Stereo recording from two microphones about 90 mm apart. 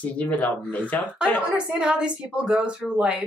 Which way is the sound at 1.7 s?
10° right (ahead or behind).